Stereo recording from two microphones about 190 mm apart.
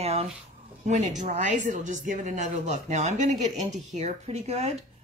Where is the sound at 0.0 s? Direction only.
30° right (ahead or behind).